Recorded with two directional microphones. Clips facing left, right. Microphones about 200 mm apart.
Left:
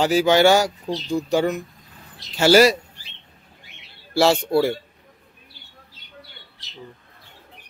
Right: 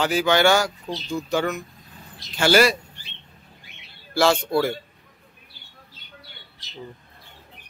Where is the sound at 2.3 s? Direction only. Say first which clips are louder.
Left 4 dB; 35° left (ahead or behind).